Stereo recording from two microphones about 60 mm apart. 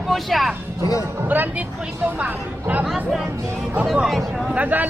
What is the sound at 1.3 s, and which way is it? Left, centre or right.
A woman's voice, right.